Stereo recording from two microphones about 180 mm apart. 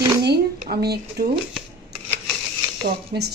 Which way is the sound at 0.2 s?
65° right (ahead or behind).